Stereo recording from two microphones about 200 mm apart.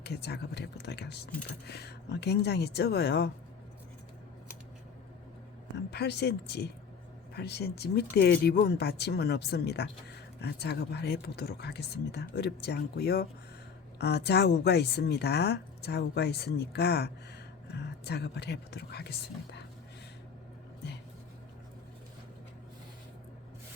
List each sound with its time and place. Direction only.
0.0 s speech: 55° left (ahead or behind)
5.9 s speech: 55° left (ahead or behind)